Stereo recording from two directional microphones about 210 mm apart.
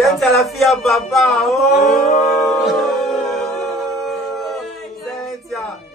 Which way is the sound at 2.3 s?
Centre (ahead or behind).